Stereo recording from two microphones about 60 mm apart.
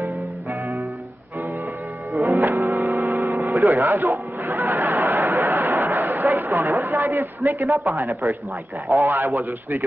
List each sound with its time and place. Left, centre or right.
2.1 s music: right
2.4 s music: right
3.4 s a sound: right
7.7 s speech: right
8.8 s a man's voice: right
9.2 s a man's voice: right